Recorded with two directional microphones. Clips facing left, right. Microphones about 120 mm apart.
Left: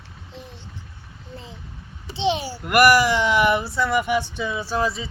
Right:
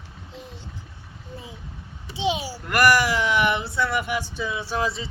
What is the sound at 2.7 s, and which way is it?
Speech, 15° left (ahead or behind).